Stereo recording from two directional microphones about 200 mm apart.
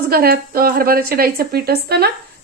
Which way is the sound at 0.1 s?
50° right (ahead or behind).